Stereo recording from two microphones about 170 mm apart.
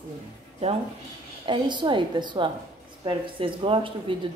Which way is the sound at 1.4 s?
30° right (ahead or behind).